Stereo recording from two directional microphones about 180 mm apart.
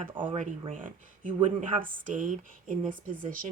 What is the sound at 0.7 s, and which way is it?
Speech, 45° right (ahead or behind).